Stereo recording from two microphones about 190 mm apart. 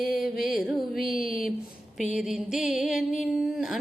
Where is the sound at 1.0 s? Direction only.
50° left (ahead or behind).